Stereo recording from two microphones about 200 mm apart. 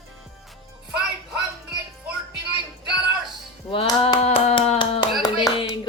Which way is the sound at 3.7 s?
30° left (ahead or behind).